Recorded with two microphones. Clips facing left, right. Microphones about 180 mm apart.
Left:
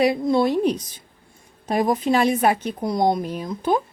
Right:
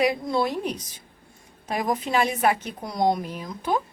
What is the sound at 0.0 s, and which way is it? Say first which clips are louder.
A woman's voice: left 5 dB; 25° left (ahead or behind).